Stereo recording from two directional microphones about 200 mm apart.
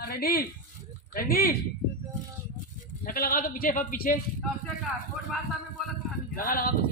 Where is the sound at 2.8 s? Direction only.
45° left (ahead or behind).